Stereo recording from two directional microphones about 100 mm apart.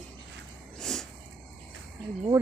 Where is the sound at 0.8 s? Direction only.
5° left (ahead or behind).